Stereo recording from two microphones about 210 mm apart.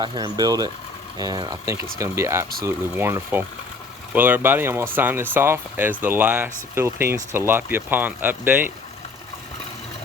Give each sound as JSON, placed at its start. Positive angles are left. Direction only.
{"t": 0.0, "sound": "speech", "side_deg": -20}